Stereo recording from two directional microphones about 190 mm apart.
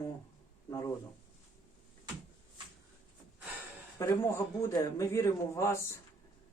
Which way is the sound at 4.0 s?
15° left (ahead or behind).